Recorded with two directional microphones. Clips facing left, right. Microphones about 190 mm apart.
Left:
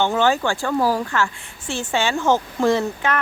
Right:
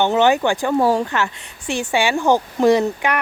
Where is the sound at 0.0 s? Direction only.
20° right (ahead or behind).